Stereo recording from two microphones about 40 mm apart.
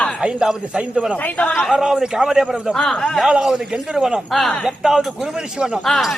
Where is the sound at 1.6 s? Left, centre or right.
Centre.